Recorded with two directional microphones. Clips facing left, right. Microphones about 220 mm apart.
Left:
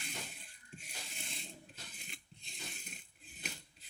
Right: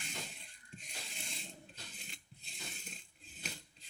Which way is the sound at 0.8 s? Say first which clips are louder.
Right 1 dB; centre (ahead or behind).